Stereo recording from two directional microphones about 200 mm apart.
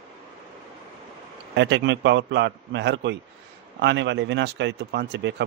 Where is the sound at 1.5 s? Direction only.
60° right (ahead or behind).